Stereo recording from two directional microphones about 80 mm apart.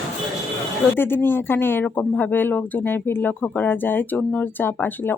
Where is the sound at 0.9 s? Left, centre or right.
Left.